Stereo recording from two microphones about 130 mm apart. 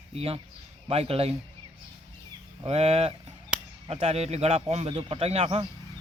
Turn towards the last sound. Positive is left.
turn(degrees=-50)  # may be behind; listen again after turning